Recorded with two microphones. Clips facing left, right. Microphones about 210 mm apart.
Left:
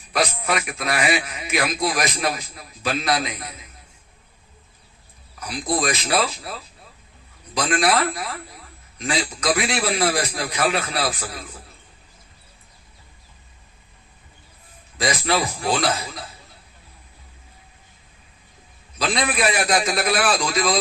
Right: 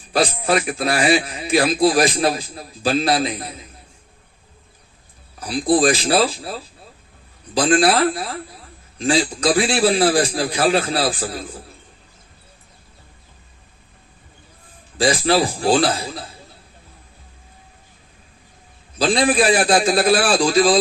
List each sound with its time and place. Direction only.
0.1 s a man's voice: 30° right (ahead or behind)
5.4 s a man's voice: 30° right (ahead or behind)
14.9 s a man's voice: 30° right (ahead or behind)
18.9 s a man's voice: 30° right (ahead or behind)